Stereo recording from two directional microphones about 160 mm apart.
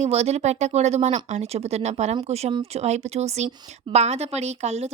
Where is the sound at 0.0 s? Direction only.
40° right (ahead or behind).